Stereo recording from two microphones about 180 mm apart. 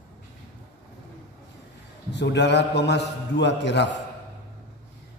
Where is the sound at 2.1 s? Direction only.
75° left (ahead or behind).